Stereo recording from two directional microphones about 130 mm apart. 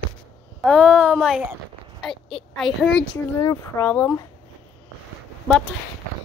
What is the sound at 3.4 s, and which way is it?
Speech, 25° left (ahead or behind).